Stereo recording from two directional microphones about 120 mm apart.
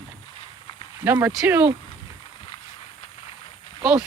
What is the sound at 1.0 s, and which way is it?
Speech, 15° right (ahead or behind).